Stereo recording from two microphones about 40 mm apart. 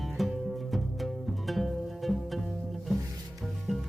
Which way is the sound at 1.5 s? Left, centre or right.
Centre.